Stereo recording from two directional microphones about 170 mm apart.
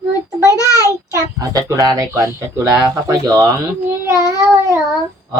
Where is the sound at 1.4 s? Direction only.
20° right (ahead or behind).